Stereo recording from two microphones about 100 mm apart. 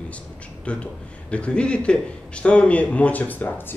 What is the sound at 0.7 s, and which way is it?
A man's voice, 10° left (ahead or behind).